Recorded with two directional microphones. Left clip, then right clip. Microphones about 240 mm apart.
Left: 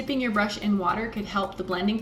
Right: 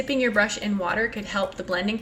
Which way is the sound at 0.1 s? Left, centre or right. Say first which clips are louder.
Right 4 dB; centre.